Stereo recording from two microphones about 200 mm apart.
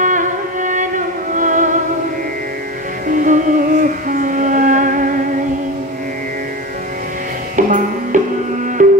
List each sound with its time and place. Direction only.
0.0 s music: 40° right (ahead or behind)
3.1 s music: 40° right (ahead or behind)
7.5 s music: 40° right (ahead or behind)